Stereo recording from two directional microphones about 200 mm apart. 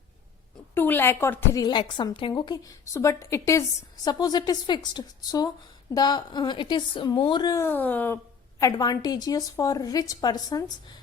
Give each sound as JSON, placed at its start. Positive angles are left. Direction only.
{"t": 0.7, "sound": "a woman's voice", "side_deg": 10}